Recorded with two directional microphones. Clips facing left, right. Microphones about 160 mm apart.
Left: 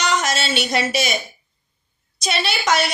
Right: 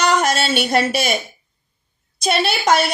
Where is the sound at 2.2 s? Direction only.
50° right (ahead or behind).